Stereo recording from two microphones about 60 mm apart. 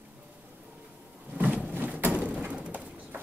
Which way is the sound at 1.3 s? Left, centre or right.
Right.